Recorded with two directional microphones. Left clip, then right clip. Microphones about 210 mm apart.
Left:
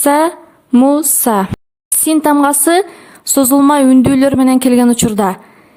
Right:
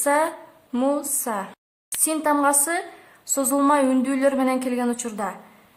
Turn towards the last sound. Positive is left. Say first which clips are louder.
# left 14 dB
turn(degrees=45)  # may be behind; listen again after turning